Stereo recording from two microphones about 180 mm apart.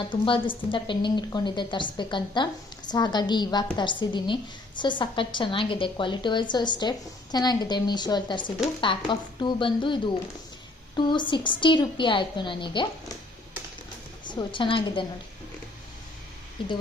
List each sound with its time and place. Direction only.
0.0 s speech: 30° left (ahead or behind)
14.3 s speech: 25° left (ahead or behind)
16.6 s speech: 25° left (ahead or behind)